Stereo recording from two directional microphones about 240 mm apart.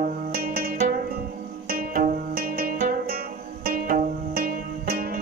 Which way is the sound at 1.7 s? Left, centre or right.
Right.